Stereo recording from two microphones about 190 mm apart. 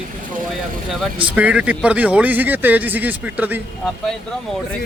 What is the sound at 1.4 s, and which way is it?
Speech, 5° right (ahead or behind).